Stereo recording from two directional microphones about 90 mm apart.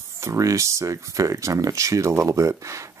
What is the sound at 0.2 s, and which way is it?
Speech, 35° right (ahead or behind).